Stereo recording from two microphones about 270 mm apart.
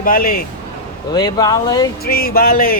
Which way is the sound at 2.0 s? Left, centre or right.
Left.